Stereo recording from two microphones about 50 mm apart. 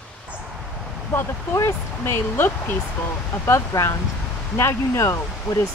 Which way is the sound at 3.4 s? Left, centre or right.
Left.